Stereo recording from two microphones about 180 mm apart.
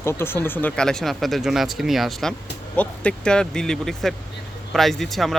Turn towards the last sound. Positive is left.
turn(degrees=0)  # may be behind; listen again after turning